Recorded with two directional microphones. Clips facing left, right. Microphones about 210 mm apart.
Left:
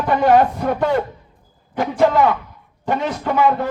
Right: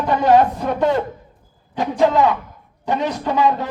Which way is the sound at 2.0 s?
20° right (ahead or behind).